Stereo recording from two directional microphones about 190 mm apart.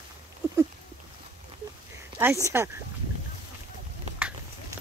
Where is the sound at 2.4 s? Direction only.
15° right (ahead or behind).